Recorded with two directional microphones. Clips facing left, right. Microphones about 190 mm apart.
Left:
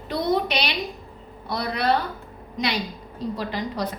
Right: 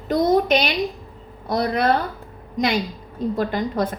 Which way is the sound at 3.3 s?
50° right (ahead or behind).